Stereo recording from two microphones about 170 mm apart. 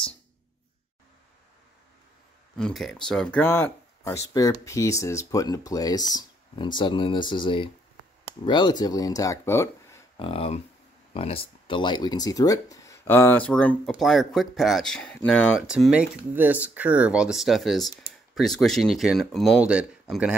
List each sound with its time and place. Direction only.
2.5 s speech: centre (ahead or behind)
10.1 s speech: 30° left (ahead or behind); by 15.6 s 5° left (ahead or behind)
15.6 s speech: 5° right (ahead or behind)